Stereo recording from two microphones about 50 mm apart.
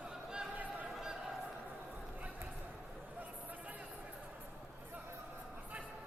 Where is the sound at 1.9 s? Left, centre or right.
Right.